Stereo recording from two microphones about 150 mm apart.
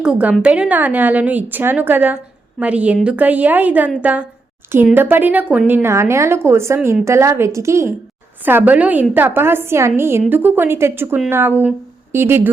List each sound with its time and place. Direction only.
0.0 s a woman's voice: 5° right (ahead or behind)